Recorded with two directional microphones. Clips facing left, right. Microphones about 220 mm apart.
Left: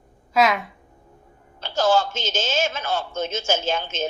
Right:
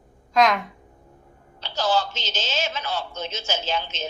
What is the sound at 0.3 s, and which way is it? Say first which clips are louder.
Speech: even; 5° left (ahead or behind).